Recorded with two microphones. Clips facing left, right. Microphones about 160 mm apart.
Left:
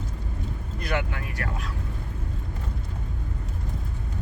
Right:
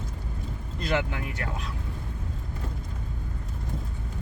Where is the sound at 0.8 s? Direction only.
20° right (ahead or behind).